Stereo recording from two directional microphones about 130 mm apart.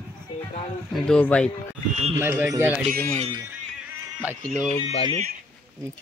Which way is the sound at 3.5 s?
15° right (ahead or behind).